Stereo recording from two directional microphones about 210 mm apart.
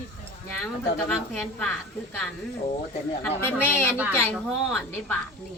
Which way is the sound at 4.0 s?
5° right (ahead or behind).